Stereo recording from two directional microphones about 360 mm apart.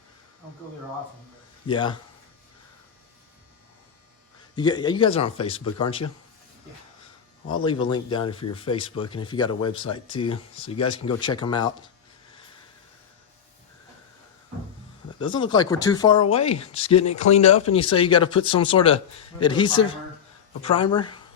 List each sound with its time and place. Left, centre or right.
1.6 s speech: centre
4.5 s speech: centre
7.6 s speech: centre
15.2 s speech: centre